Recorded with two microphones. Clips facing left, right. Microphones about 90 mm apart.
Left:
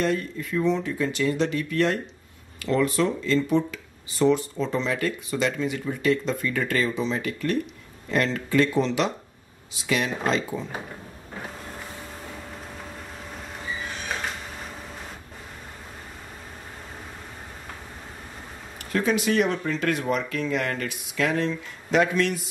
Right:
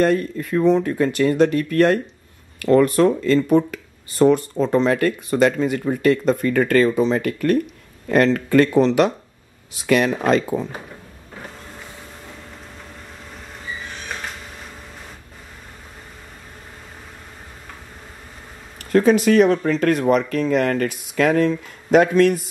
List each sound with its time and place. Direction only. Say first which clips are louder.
0.0 s speech: right 7 dB; 50° right (ahead or behind)
18.9 s speech: right 9 dB; 40° right (ahead or behind)